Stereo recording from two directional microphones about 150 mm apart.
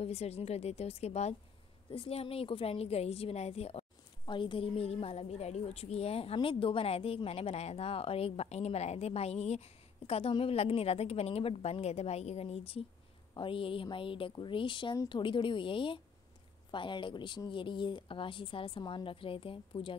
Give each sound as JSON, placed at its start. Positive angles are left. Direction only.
{"t": 0.0, "sound": "a woman's voice", "side_deg": 45}